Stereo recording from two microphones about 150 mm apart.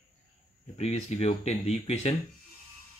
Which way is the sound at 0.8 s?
45° left (ahead or behind).